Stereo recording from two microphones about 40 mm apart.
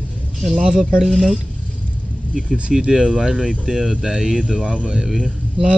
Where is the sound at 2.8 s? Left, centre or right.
Right.